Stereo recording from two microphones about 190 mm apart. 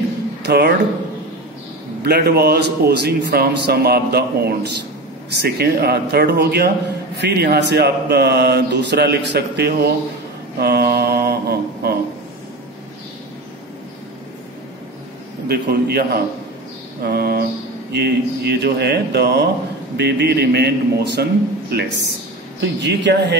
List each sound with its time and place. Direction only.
0.5 s speech: 55° right (ahead or behind)
2.0 s speech: 55° right (ahead or behind)
10.6 s mantra: 55° right (ahead or behind)
15.4 s speech: 55° right (ahead or behind)
17.0 s a sound: 55° right (ahead or behind)
17.9 s speech: 60° right (ahead or behind)